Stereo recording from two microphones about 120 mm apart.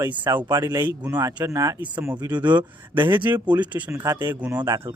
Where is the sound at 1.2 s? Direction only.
30° right (ahead or behind).